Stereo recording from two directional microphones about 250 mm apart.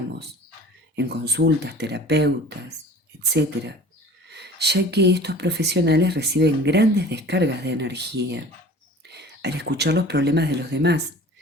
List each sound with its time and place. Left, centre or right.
0.9 s speech: right
4.3 s speech: right